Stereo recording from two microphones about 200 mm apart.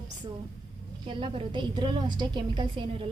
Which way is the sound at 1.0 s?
25° right (ahead or behind).